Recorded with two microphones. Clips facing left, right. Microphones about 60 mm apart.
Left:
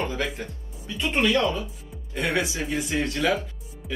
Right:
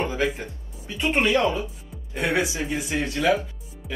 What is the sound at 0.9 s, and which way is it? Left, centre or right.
Speech, right.